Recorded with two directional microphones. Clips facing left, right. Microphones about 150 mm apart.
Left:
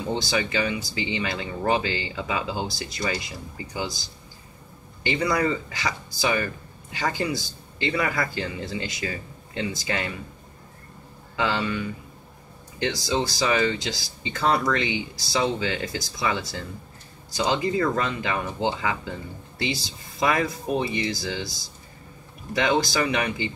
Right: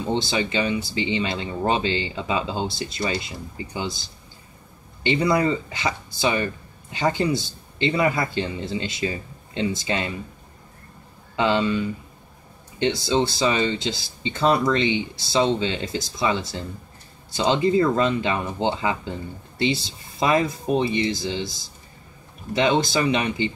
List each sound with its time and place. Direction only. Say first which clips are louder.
0.0 s speech: right 2 dB; 25° right (ahead or behind)
5.0 s speech: right 3 dB; 25° right (ahead or behind)
11.3 s speech: right 5 dB; 25° right (ahead or behind)